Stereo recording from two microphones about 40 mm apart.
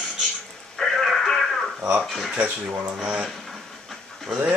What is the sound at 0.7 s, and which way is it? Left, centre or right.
Radio, centre.